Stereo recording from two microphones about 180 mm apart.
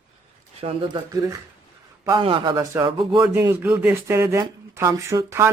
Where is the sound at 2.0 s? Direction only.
25° right (ahead or behind).